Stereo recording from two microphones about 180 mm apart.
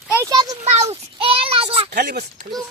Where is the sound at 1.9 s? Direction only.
60° right (ahead or behind).